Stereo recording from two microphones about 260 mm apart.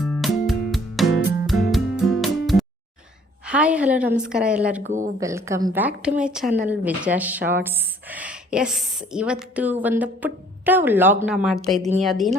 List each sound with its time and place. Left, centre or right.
0.0 s music: centre
3.4 s a woman's voice: centre
4.9 s speech: right
5.2 s a woman's voice: centre